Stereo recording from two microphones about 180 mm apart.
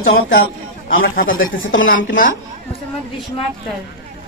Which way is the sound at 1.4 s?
90° left.